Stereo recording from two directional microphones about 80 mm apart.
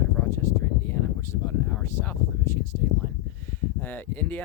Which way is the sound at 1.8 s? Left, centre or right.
Left.